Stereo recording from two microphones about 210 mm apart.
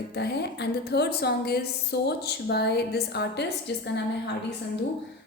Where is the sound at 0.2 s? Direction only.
50° left (ahead or behind).